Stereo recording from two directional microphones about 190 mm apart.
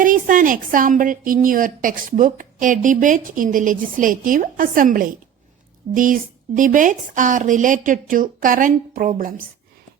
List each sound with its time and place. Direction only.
0.0 s a woman's voice: 45° right (ahead or behind)